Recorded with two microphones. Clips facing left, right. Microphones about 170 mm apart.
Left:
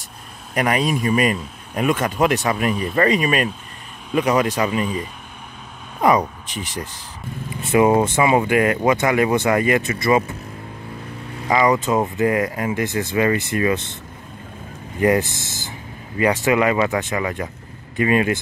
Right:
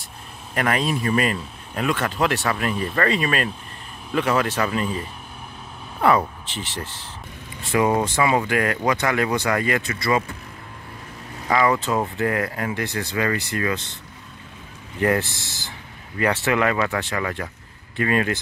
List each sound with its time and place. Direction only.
0.6 s a man's voice: 15° left (ahead or behind)
11.4 s a man's voice: 15° left (ahead or behind)
15.0 s a man's voice: 15° left (ahead or behind)
15.2 s speech: 45° left (ahead or behind)
16.2 s a man's voice: 15° left (ahead or behind)